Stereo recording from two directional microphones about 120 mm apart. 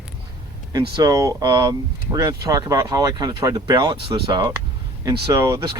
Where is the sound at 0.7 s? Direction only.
35° right (ahead or behind).